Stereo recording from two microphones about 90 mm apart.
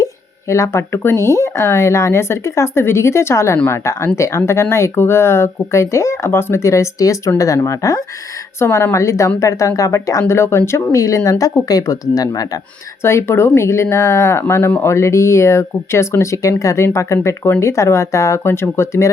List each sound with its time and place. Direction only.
0.0 s speech: 35° left (ahead or behind)
13.0 s speech: 30° left (ahead or behind)